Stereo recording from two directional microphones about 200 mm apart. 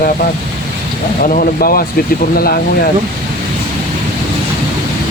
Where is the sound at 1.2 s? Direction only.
45° left (ahead or behind).